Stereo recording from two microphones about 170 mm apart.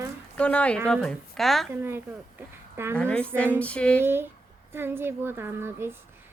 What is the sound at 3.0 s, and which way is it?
Speech, 5° left (ahead or behind).